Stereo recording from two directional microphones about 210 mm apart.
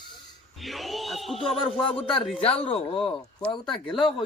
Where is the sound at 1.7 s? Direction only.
25° left (ahead or behind).